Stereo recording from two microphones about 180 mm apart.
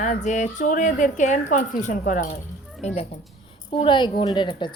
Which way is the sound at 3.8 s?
25° left (ahead or behind).